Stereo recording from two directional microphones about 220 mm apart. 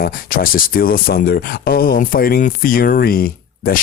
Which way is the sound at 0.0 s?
40° left (ahead or behind).